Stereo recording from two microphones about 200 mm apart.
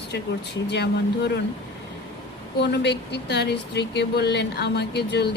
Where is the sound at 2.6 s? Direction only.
55° left (ahead or behind).